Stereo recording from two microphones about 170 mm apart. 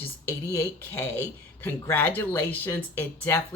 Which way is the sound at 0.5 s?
15° left (ahead or behind).